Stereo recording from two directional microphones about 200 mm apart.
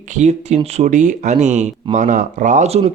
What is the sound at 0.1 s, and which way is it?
Speech, 35° right (ahead or behind).